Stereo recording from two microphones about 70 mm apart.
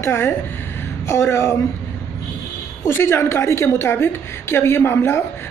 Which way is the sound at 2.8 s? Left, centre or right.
Left.